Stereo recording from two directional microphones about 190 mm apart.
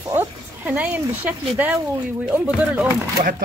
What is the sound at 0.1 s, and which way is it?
Speech, 10° right (ahead or behind).